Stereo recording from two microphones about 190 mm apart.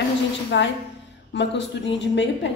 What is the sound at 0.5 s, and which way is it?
A woman's voice, 65° left (ahead or behind).